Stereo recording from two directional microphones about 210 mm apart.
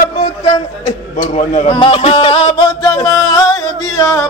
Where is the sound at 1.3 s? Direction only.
30° left (ahead or behind); by 3.5 s 15° left (ahead or behind).